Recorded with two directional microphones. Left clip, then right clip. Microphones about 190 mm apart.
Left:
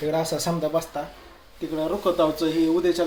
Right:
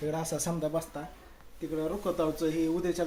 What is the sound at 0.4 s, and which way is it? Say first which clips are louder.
Speech: left 8 dB; 10° right (ahead or behind).